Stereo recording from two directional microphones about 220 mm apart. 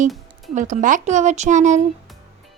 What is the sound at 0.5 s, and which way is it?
Speech, 35° right (ahead or behind).